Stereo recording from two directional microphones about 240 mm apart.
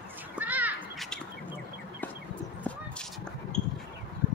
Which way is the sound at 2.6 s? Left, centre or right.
Centre.